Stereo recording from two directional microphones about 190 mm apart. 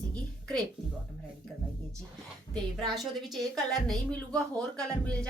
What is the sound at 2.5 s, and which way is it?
Speech, centre (ahead or behind).